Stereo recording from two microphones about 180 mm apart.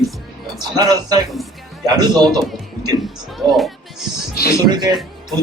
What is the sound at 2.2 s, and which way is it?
Speech, centre (ahead or behind).